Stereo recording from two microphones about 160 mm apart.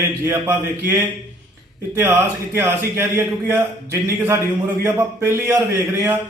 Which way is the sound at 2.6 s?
15° right (ahead or behind).